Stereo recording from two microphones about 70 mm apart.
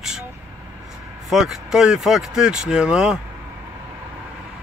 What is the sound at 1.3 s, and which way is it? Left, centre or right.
Speech, centre.